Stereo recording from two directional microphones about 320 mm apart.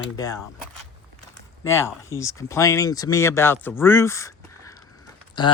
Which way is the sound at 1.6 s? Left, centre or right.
Centre.